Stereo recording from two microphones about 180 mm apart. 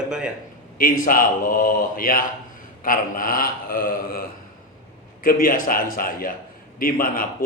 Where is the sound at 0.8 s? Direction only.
55° left (ahead or behind).